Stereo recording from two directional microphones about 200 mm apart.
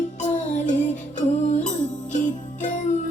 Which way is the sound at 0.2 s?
40° left (ahead or behind).